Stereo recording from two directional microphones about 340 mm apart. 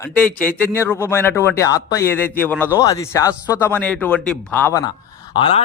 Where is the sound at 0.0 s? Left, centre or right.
Centre.